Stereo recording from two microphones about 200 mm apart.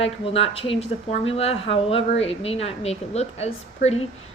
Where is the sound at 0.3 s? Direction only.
30° left (ahead or behind).